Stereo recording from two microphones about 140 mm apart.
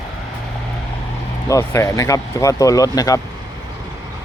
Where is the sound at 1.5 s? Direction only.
20° left (ahead or behind).